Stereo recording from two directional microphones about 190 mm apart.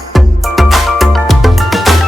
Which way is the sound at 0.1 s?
Centre (ahead or behind).